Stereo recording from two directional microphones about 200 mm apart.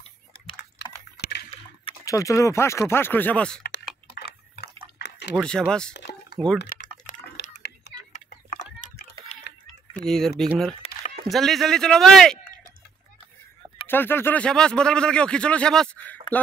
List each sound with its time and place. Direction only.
0.6 s typing: 55° left (ahead or behind)
1.9 s speech: 15° left (ahead or behind)
4.1 s a sound: 55° left (ahead or behind)
4.9 s liquid: 55° left (ahead or behind)
5.3 s speech: 5° left (ahead or behind)
6.7 s typing: 45° left (ahead or behind)
7.4 s a sound: 55° left (ahead or behind)
8.2 s a sound: 35° left (ahead or behind)
9.9 s speech: 5° left (ahead or behind)
10.8 s a sound: 30° left (ahead or behind)
11.2 s speech: centre (ahead or behind)
13.8 s speech: 10° left (ahead or behind)